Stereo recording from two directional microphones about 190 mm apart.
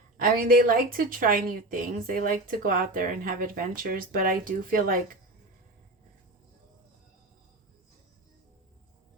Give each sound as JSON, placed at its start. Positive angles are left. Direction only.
{"t": 0.2, "sound": "a woman's voice", "side_deg": -50}